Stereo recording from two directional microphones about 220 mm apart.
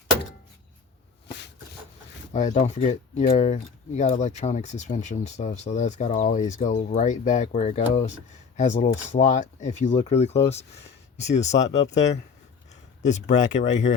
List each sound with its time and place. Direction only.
2.3 s speech: 35° left (ahead or behind)